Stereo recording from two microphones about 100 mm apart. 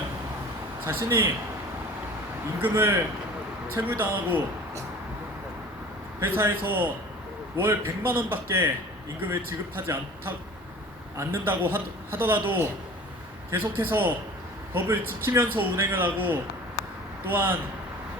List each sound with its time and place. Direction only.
0.9 s a man's voice: 25° right (ahead or behind)
2.6 s a man's voice: 20° right (ahead or behind)
6.1 s a man's voice: 25° right (ahead or behind)
17.3 s a man's voice: 20° right (ahead or behind)